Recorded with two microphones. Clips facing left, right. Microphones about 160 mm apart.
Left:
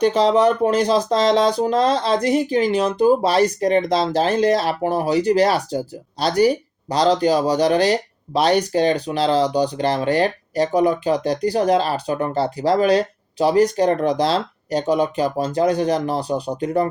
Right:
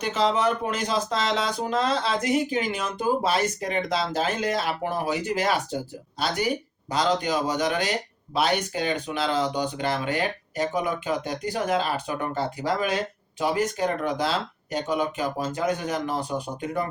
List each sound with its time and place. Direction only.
0.0 s speech: 35° left (ahead or behind)